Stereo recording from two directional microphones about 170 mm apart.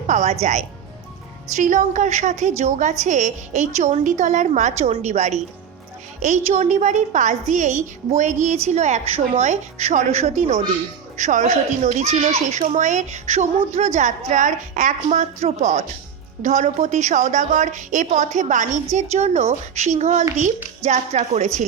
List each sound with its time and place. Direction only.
0.1 s speech: 45° right (ahead or behind)
1.5 s a child's voice: 45° right (ahead or behind)